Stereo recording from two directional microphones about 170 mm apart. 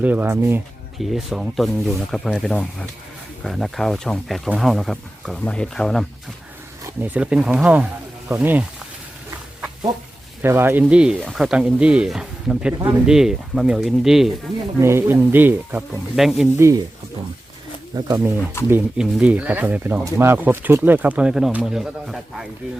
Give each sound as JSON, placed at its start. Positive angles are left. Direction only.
{"t": 0.0, "sound": "speech", "side_deg": -10}
{"t": 0.9, "sound": "speech", "side_deg": 0}
{"t": 6.8, "sound": "speech", "side_deg": -10}
{"t": 10.4, "sound": "speech", "side_deg": -15}
{"t": 14.8, "sound": "speech", "side_deg": -15}
{"t": 16.6, "sound": "speech", "side_deg": -20}
{"t": 17.9, "sound": "speech", "side_deg": -15}